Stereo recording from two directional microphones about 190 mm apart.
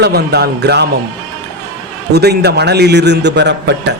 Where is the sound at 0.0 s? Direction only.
60° right (ahead or behind).